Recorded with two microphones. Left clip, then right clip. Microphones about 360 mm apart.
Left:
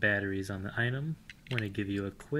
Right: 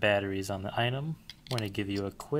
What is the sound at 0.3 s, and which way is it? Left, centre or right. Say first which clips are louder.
Speech: right 3 dB; centre.